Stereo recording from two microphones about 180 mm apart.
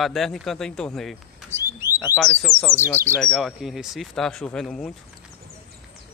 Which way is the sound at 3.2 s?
Centre (ahead or behind).